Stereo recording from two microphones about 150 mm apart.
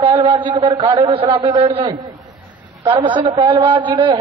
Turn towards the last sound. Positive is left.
turn(degrees=-35)  # may be behind; listen again after turning